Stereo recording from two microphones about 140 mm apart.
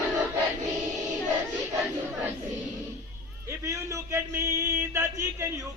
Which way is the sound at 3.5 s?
20° right (ahead or behind).